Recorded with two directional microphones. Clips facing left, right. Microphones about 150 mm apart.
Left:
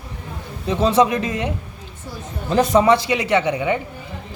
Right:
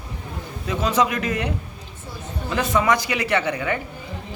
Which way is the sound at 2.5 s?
35° left (ahead or behind).